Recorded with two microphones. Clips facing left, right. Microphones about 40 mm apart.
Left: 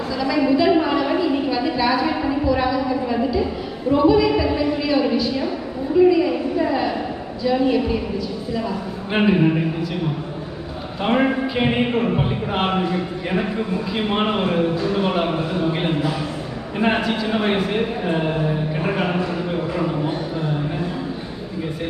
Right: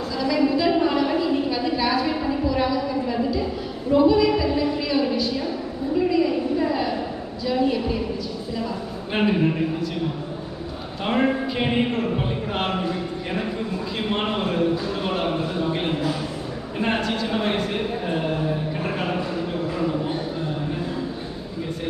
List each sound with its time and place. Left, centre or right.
0.2 s a sound: centre
3.9 s a man's voice: centre
4.4 s music: centre
5.1 s a man's voice: centre
6.0 s a sound: centre
7.4 s a man's voice: centre
9.1 s a man's voice: centre
11.0 s a man's voice: centre